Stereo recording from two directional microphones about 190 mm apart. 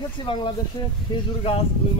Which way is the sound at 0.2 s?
25° left (ahead or behind).